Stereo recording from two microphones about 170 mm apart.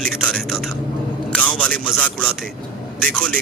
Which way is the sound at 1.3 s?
10° left (ahead or behind).